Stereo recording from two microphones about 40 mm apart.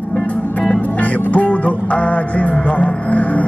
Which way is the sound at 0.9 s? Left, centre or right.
Left.